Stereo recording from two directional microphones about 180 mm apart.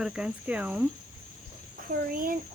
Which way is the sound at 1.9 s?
50° right (ahead or behind).